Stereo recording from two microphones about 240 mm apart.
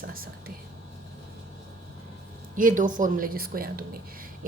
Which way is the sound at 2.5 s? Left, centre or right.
Right.